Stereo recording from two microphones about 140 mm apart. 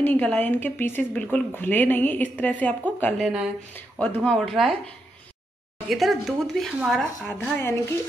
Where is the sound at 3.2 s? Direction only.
5° right (ahead or behind).